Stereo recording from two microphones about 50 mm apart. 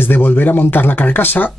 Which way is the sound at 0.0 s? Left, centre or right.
Left.